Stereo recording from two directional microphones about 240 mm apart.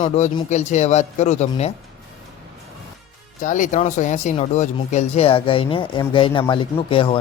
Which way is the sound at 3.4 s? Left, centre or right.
Left.